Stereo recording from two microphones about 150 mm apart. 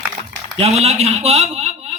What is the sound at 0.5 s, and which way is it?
A man's voice, 45° right (ahead or behind).